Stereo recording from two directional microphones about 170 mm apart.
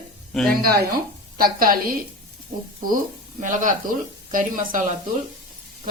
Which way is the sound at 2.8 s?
50° right (ahead or behind).